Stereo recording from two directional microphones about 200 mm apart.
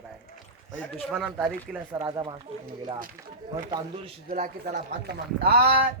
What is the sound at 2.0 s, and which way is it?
Speech, 25° right (ahead or behind).